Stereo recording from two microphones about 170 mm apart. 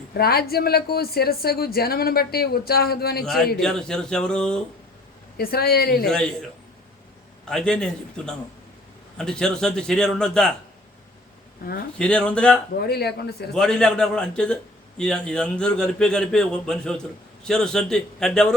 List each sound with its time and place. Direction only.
0.1 s speech: 65° left (ahead or behind)
3.6 s a man's voice: 5° left (ahead or behind)
5.4 s speech: 65° left (ahead or behind)
6.1 s a man's voice: 5° left (ahead or behind)
7.4 s a man's voice: 5° left (ahead or behind)
11.9 s speech: 5° left (ahead or behind)
12.8 s speech: 65° left (ahead or behind)
13.5 s a man's voice: 5° left (ahead or behind)